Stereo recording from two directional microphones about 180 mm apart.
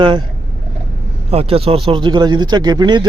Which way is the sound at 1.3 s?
35° right (ahead or behind).